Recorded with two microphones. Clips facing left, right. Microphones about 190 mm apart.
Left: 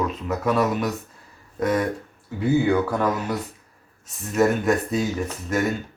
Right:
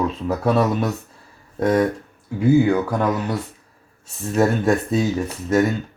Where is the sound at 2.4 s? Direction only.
10° right (ahead or behind).